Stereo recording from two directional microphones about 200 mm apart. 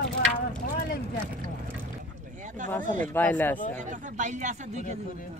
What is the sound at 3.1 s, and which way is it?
Speech, 10° left (ahead or behind).